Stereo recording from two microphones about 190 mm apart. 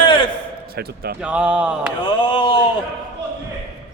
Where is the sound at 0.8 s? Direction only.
55° right (ahead or behind).